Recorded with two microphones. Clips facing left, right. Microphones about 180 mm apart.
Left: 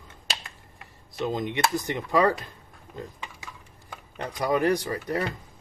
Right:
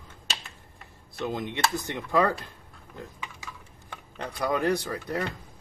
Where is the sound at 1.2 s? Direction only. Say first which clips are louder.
Left 2 dB; 15° left (ahead or behind).